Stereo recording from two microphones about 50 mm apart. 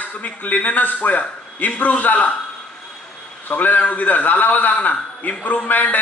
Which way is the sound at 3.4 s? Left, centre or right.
Left.